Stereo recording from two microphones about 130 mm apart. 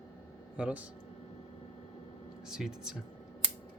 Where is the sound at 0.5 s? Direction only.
10° right (ahead or behind).